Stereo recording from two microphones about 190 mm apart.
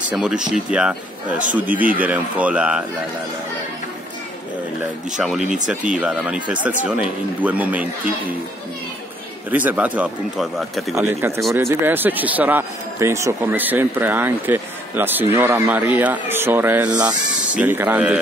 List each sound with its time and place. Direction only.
0.1 s speech: 5° right (ahead or behind)
5.7 s speech: 5° right (ahead or behind)
9.5 s speech: 10° right (ahead or behind)
11.0 s speech: 15° right (ahead or behind)
16.9 s speech: 20° right (ahead or behind)
17.6 s speech: 10° right (ahead or behind)